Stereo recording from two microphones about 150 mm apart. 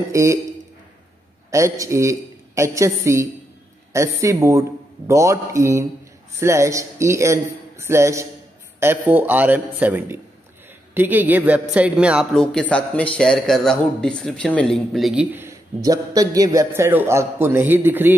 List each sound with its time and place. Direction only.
0.1 s a man's voice: 20° right (ahead or behind)
1.5 s a man's voice: 20° right (ahead or behind)
12.4 s a man's voice: 5° left (ahead or behind)
15.3 s a man's voice: 20° right (ahead or behind)